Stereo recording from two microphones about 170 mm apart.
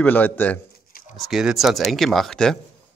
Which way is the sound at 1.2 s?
Centre (ahead or behind).